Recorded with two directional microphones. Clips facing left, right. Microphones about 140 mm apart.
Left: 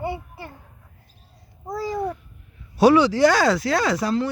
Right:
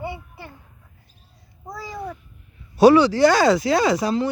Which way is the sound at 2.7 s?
10° left (ahead or behind).